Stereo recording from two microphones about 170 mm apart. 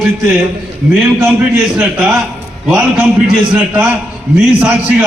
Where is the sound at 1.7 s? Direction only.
10° right (ahead or behind).